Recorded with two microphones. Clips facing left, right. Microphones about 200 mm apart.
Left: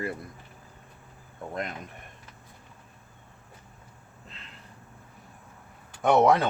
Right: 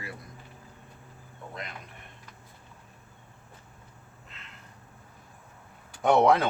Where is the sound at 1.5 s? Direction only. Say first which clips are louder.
Left 8 dB; 50° left (ahead or behind).